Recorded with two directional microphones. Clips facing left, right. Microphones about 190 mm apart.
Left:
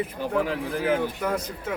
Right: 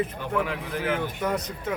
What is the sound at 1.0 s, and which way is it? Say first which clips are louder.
Speech: left 1 dB; 10° left (ahead or behind).